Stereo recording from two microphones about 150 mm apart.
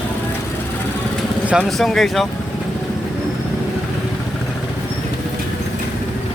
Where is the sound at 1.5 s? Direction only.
Centre (ahead or behind).